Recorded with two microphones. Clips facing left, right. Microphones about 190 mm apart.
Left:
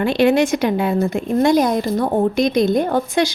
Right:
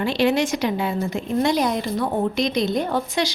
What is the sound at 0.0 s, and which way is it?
Speech, 55° left (ahead or behind).